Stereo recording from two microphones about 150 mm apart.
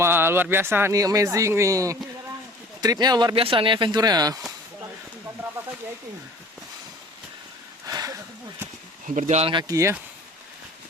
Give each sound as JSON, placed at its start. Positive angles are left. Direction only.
{"t": 0.0, "sound": "speech", "side_deg": -15}
{"t": 3.3, "sound": "speech", "side_deg": -35}
{"t": 7.9, "sound": "a sound", "side_deg": -25}
{"t": 9.0, "sound": "speech", "side_deg": -55}
{"t": 9.5, "sound": "speech", "side_deg": -25}